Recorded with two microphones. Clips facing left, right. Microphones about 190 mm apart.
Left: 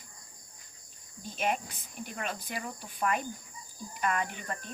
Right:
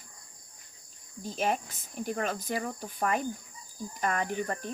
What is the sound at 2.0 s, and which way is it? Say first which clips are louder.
Cricket: right 6 dB; 40° right (ahead or behind).